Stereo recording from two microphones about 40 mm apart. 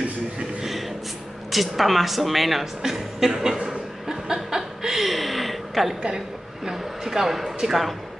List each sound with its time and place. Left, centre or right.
0.6 s a sound: centre
1.5 s speech: centre
4.1 s chuckle: centre
6.0 s speech: centre